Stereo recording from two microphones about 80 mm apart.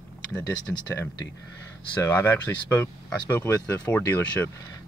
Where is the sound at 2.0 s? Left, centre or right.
Left.